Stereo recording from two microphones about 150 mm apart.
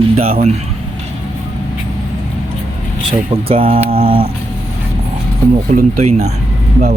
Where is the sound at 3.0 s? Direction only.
40° right (ahead or behind).